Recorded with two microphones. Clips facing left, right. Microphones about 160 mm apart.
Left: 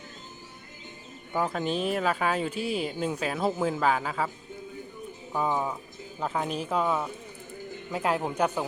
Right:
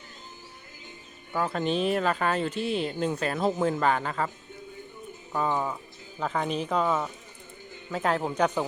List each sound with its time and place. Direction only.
1.3 s speech: 15° left (ahead or behind)
1.6 s speech: centre (ahead or behind)
5.3 s speech: 10° left (ahead or behind)